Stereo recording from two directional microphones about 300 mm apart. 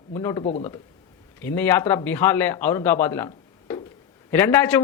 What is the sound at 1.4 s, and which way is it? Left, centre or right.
A man's voice, centre.